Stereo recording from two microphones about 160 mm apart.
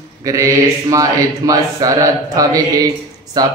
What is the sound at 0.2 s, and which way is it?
Speech, 20° right (ahead or behind).